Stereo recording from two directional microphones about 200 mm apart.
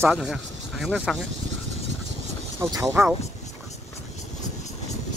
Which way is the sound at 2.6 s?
15° right (ahead or behind).